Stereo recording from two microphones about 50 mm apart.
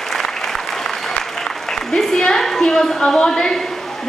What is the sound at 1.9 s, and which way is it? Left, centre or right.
A woman's voice, centre.